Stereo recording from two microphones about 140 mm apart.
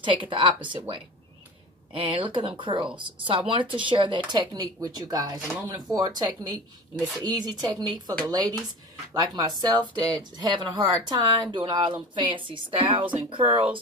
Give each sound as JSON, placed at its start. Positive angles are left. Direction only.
{"t": 0.0, "sound": "speech", "side_deg": -35}
{"t": 1.9, "sound": "speech", "side_deg": -40}